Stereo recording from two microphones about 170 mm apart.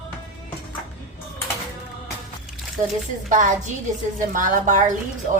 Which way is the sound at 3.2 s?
50° right (ahead or behind).